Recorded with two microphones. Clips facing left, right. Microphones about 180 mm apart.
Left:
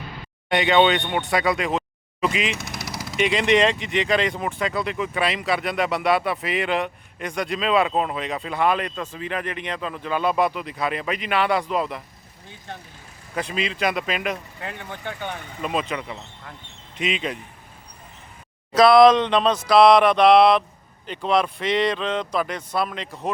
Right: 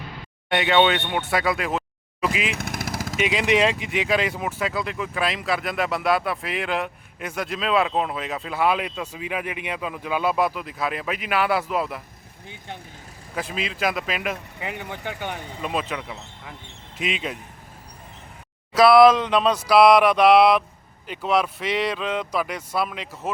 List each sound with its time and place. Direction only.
0.5 s speech: centre (ahead or behind)
2.5 s vehicle: 55° right (ahead or behind)
3.2 s speech: 5° right (ahead or behind)
13.3 s speech: centre (ahead or behind)
15.6 s speech: centre (ahead or behind)
18.8 s speech: 5° right (ahead or behind)